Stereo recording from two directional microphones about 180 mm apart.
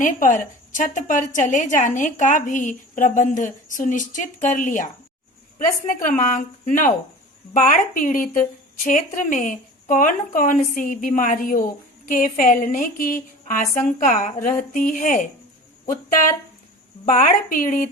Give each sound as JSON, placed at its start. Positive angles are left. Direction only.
{"t": 0.0, "sound": "a woman's voice", "side_deg": 45}
{"t": 17.1, "sound": "a woman's voice", "side_deg": 50}